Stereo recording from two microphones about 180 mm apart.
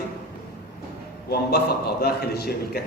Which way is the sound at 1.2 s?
60° left (ahead or behind).